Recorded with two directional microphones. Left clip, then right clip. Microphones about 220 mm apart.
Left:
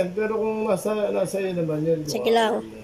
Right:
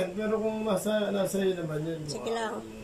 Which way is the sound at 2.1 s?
30° left (ahead or behind).